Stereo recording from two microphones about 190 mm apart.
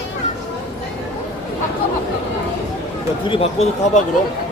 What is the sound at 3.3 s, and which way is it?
Speech, 35° left (ahead or behind).